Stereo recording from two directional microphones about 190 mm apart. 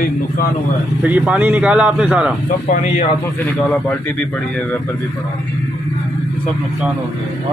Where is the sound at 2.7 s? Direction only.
35° left (ahead or behind).